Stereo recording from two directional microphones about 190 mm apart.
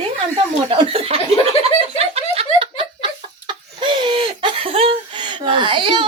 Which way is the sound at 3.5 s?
25° right (ahead or behind).